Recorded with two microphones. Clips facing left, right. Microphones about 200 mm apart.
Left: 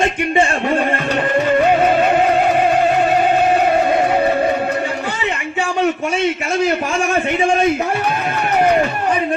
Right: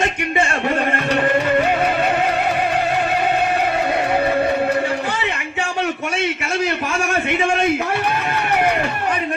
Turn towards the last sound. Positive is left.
turn(degrees=35)  # may be behind; listen again after turning